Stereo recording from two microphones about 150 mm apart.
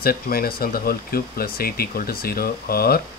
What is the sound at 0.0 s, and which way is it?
Speech, 85° left.